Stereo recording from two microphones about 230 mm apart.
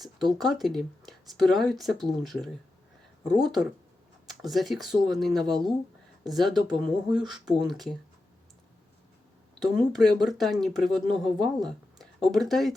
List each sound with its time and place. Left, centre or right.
0.0 s speech: centre
6.6 s speech: centre
7.4 s speech: centre
9.6 s speech: centre